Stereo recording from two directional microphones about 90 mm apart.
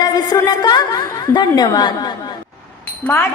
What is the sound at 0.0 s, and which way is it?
A woman's voice, 45° left (ahead or behind).